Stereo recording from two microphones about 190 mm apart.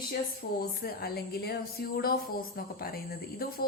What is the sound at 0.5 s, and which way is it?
Speech, 55° left (ahead or behind).